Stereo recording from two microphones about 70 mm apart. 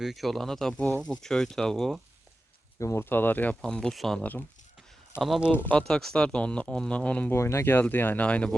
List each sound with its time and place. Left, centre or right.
0.0 s speech: centre
2.7 s speech: left
3.0 s speech: left
3.6 s speech: centre
4.2 s speech: left
5.1 s speech: left
5.7 s speech: centre
7.3 s speech: left; by 8.4 s centre